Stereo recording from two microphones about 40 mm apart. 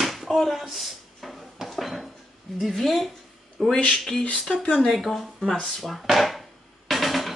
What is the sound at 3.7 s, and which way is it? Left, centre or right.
Speech, left.